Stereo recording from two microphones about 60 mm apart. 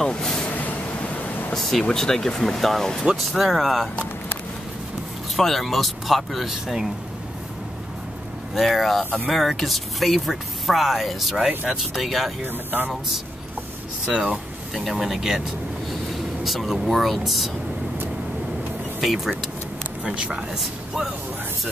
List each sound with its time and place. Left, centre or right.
0.0 s vehicle: centre
1.5 s speech: centre
3.3 s speech: centre
5.3 s speech: centre
8.5 s speech: centre
11.3 s speech: centre
11.8 s speech: centre
14.0 s speech: centre
14.7 s speech: centre
18.9 s vehicle: centre
20.0 s speech: centre